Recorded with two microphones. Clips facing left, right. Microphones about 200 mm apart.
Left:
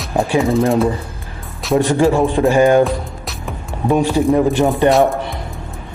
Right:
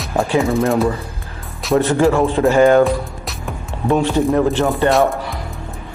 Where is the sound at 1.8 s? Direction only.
15° left (ahead or behind).